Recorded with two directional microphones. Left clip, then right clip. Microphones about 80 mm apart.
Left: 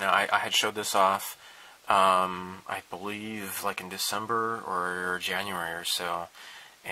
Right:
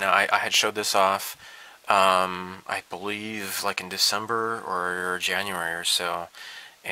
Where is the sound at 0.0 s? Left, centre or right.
Right.